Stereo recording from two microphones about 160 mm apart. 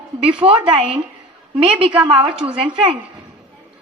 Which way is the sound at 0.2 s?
35° right (ahead or behind).